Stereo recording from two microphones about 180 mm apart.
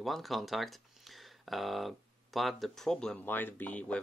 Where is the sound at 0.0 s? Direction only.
Centre (ahead or behind).